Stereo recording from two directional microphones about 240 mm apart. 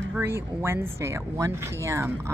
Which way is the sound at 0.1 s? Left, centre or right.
Centre.